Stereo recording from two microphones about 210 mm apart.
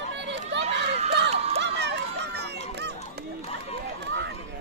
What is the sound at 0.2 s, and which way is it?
Run, 55° right (ahead or behind).